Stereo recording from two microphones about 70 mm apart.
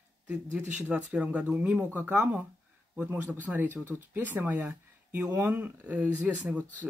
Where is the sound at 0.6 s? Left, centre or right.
Right.